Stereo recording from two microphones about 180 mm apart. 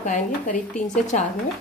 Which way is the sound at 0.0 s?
45° left (ahead or behind).